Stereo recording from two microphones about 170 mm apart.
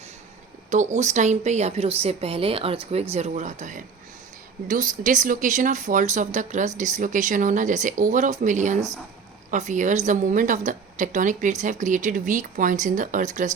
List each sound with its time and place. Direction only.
0.7 s a woman's voice: 45° right (ahead or behind)